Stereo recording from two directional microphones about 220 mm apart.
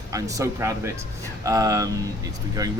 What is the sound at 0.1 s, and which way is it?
Speech, 15° right (ahead or behind).